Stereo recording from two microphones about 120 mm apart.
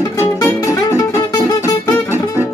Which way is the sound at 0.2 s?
25° left (ahead or behind).